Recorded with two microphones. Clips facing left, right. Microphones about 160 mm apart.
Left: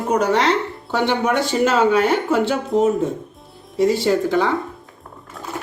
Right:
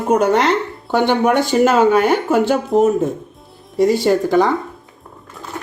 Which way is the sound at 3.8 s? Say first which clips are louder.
Right 3 dB; 45° right (ahead or behind).